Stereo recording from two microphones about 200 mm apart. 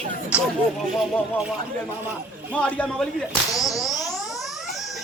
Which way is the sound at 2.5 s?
5° left (ahead or behind).